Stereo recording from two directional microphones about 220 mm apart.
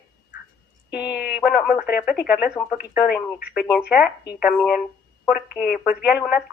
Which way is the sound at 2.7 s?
45° left (ahead or behind).